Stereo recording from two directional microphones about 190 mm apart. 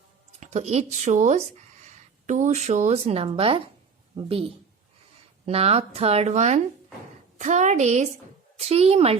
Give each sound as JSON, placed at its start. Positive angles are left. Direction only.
{"t": 0.3, "sound": "a woman's voice", "side_deg": -35}
{"t": 5.5, "sound": "a woman's voice", "side_deg": -30}